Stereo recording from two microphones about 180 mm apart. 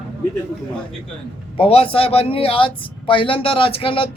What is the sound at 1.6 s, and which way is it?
Speech, 30° left (ahead or behind).